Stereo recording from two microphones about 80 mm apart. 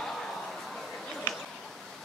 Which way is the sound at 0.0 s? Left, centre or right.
Centre.